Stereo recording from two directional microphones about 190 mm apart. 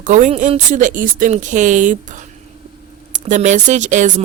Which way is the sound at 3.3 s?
40° right (ahead or behind).